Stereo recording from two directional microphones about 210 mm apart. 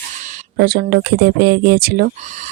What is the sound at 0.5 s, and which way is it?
Speech, 45° right (ahead or behind).